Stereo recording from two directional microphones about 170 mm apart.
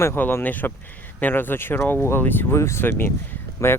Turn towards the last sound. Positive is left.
turn(degrees=15)  # may be behind; listen again after turning